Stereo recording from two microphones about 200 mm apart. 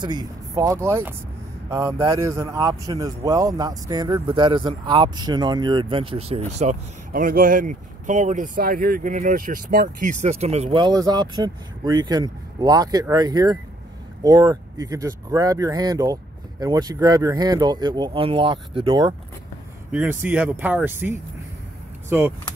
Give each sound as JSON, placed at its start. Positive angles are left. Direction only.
{"t": 0.0, "sound": "speech", "side_deg": -20}
{"t": 19.9, "sound": "speech", "side_deg": -10}